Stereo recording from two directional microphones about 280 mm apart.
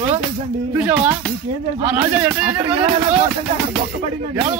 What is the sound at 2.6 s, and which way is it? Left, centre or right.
Speech, right.